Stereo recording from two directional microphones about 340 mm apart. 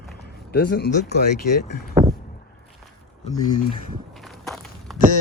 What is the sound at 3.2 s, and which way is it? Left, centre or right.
Speech, centre.